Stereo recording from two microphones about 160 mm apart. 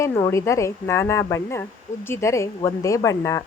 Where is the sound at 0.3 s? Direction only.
20° left (ahead or behind).